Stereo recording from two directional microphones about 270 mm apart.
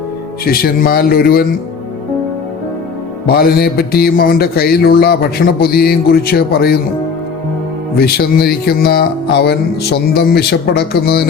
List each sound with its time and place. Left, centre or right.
0.4 s music: left
3.2 s music: left
7.9 s music: left